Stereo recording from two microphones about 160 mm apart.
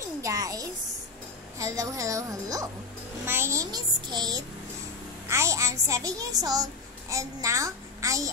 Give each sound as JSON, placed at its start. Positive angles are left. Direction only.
{"t": 0.2, "sound": "a child's voice", "side_deg": -20}